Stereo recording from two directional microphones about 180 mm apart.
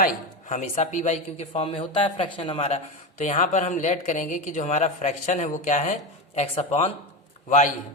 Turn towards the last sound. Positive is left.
turn(degrees=45)  # may be behind; listen again after turning